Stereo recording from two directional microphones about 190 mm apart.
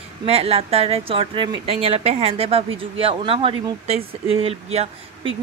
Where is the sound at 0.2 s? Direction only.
30° right (ahead or behind).